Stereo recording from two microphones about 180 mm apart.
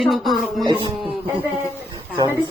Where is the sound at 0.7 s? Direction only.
25° right (ahead or behind).